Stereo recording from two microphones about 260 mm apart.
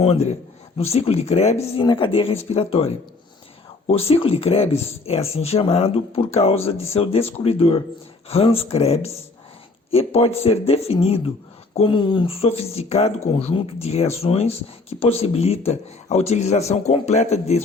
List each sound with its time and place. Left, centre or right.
0.0 s speech: left
3.8 s speech: left